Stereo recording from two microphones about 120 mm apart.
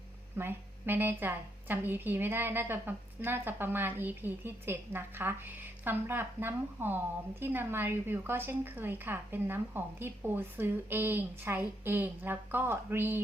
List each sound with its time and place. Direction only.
0.3 s a woman's voice: 20° right (ahead or behind)